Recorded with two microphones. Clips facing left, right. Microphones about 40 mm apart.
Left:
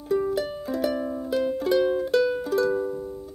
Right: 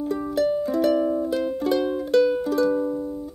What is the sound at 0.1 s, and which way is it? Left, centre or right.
Music, centre.